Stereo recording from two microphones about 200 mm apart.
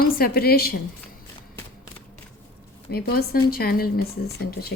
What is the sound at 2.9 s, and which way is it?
Speech, 50° left (ahead or behind).